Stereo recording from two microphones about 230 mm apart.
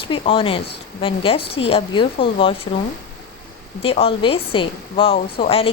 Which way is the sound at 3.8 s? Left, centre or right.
Left.